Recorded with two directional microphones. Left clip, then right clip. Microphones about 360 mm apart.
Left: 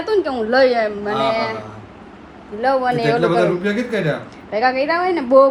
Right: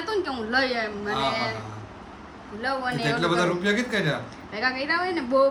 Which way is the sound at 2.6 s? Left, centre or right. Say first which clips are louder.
Left 10 dB; centre.